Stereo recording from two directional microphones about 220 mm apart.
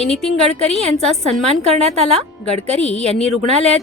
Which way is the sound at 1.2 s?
30° right (ahead or behind).